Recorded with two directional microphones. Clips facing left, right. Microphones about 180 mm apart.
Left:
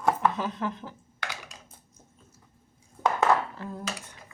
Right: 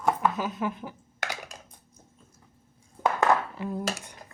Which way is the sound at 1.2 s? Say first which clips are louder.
Right 3 dB; 45° right (ahead or behind).